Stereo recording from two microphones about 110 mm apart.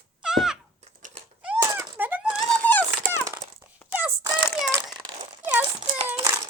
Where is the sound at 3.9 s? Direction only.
15° right (ahead or behind).